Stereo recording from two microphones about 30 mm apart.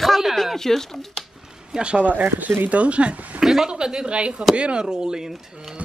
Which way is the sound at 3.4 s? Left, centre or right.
Centre.